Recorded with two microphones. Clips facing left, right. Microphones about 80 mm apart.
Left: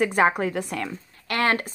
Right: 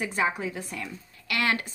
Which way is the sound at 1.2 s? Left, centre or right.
Left.